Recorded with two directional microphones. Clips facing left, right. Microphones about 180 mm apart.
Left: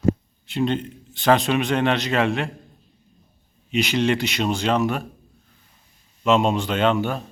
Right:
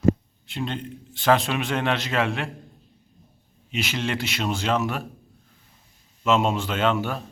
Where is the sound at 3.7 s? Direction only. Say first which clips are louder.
Left 7 dB; centre (ahead or behind).